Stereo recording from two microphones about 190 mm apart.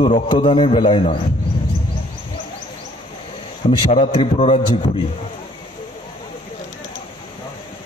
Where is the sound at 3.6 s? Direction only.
30° left (ahead or behind).